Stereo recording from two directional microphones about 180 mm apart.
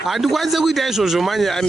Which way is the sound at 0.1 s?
Centre (ahead or behind).